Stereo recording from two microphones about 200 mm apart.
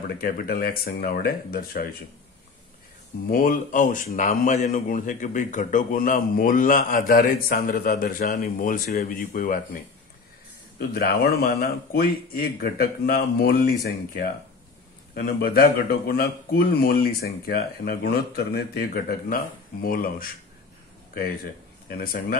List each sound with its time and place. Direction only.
0.2 s a man's voice: 50° left (ahead or behind)
3.3 s a man's voice: 45° left (ahead or behind)
10.8 s a man's voice: 50° left (ahead or behind)
21.8 s a man's voice: 45° left (ahead or behind)